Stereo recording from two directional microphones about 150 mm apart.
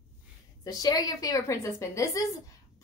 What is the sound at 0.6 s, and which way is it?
A woman's voice, 25° left (ahead or behind).